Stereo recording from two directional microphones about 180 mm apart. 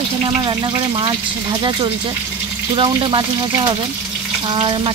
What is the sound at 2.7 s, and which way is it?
Speech, 30° right (ahead or behind).